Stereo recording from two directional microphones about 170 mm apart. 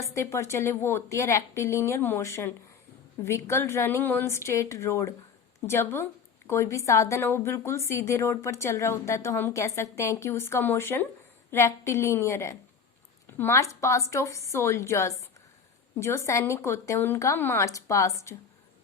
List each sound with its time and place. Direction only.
0.0 s a woman's voice: 15° left (ahead or behind)